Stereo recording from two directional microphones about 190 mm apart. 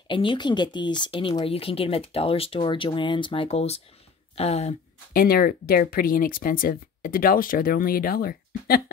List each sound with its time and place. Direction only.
0.1 s speech: 25° left (ahead or behind)
5.1 s speech: 50° left (ahead or behind)